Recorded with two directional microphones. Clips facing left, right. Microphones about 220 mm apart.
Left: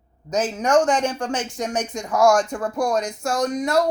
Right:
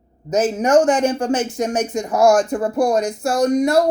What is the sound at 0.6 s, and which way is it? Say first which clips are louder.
Speech: right 3 dB; 5° right (ahead or behind).